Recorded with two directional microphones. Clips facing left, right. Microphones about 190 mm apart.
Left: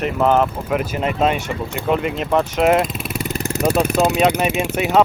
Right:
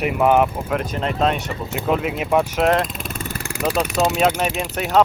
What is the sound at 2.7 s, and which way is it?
Vehicle, 5° left (ahead or behind).